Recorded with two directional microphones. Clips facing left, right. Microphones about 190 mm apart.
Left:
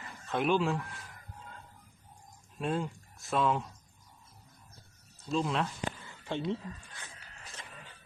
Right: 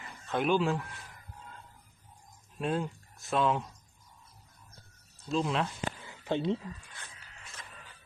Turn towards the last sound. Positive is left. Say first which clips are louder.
# left 1 dB
turn(degrees=35)  # may be behind; listen again after turning